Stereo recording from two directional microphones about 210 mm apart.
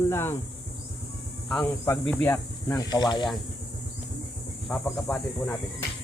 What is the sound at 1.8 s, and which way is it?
Speech, 10° left (ahead or behind).